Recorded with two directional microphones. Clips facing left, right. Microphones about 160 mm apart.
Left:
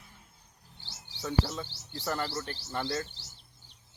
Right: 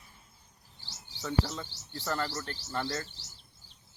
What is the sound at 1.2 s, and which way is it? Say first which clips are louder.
Speech: left 1 dB; 10° left (ahead or behind).